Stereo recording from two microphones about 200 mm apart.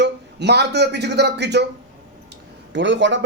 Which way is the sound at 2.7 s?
65° right (ahead or behind).